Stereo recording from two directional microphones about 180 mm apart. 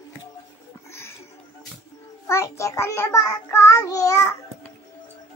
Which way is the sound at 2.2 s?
15° left (ahead or behind).